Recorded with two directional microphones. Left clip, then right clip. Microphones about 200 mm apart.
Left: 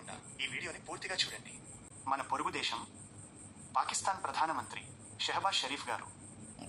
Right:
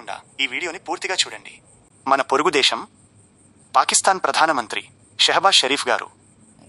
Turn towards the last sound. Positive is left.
turn(degrees=-45)  # may be behind; listen again after turning